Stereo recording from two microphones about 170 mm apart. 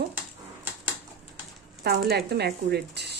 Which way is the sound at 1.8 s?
70° right (ahead or behind).